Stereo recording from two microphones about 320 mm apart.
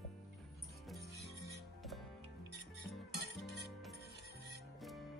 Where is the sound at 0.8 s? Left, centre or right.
Centre.